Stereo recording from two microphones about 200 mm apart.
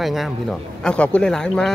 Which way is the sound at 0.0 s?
Centre (ahead or behind).